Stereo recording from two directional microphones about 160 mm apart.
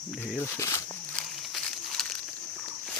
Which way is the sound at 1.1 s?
5° left (ahead or behind).